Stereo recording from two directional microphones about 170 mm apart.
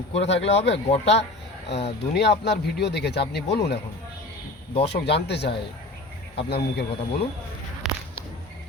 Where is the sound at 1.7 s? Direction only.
80° left.